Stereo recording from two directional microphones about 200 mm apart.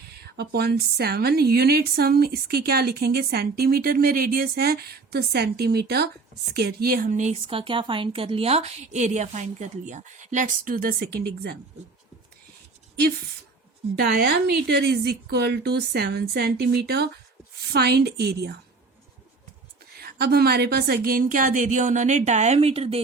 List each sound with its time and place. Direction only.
0.3 s a woman's voice: 55° right (ahead or behind)
13.9 s a woman's voice: 50° right (ahead or behind)
20.0 s speech: 50° right (ahead or behind); by 23.0 s 30° right (ahead or behind)